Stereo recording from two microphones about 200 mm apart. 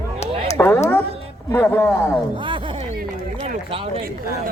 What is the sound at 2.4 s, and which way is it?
Speech, 25° right (ahead or behind).